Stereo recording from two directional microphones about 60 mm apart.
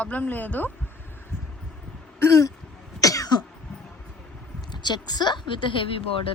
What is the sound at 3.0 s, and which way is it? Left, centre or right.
Cough, left.